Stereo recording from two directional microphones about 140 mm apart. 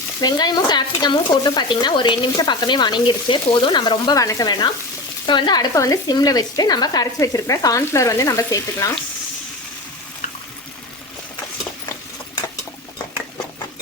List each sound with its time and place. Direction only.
0.2 s stir: 30° left (ahead or behind)
5.2 s speech: 35° left (ahead or behind)